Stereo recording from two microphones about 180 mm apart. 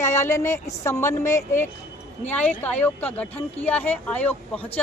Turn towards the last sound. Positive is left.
turn(degrees=10)  # may be behind; listen again after turning